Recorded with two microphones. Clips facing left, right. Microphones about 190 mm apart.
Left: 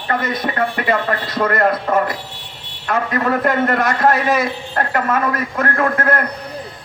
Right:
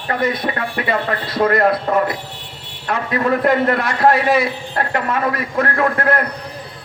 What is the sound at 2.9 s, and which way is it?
A man's voice, 45° left (ahead or behind).